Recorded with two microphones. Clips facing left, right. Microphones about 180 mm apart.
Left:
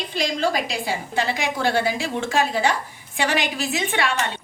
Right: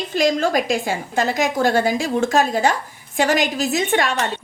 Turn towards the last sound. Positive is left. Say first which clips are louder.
# right 4 dB
turn(degrees=-40)  # may be behind; listen again after turning